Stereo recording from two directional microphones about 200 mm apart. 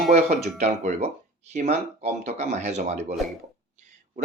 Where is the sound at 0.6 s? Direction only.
35° right (ahead or behind).